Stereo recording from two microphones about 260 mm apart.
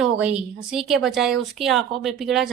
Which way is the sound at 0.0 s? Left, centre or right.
Centre.